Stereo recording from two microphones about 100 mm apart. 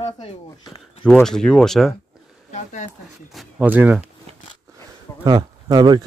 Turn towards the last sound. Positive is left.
turn(degrees=-45)  # may be behind; listen again after turning